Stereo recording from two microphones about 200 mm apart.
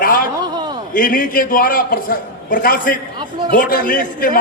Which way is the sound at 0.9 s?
45° left (ahead or behind).